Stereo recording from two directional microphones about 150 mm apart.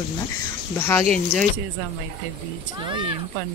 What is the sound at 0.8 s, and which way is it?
Speech, 15° left (ahead or behind).